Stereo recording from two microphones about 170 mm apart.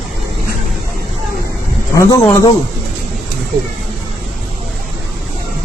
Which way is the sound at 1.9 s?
15° left (ahead or behind).